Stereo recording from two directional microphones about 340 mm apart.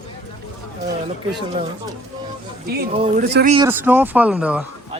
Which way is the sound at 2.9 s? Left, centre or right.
Centre.